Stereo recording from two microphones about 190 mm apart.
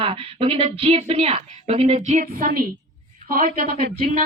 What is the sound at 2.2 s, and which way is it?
A woman's voice, 50° right (ahead or behind).